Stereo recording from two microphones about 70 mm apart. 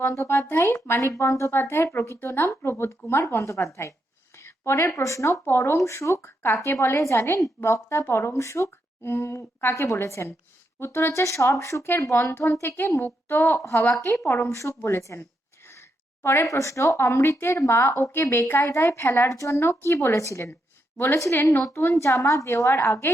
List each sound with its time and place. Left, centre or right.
0.0 s a woman's voice: left
14.8 s speech: left
16.5 s a woman's voice: left